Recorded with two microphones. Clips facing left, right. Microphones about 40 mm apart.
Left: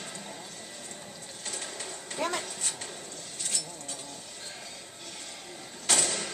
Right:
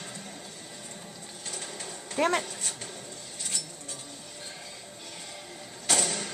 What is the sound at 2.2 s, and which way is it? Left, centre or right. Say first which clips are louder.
Speech: right 6 dB; right.